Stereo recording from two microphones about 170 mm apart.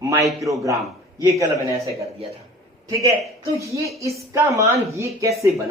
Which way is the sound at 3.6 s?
20° right (ahead or behind).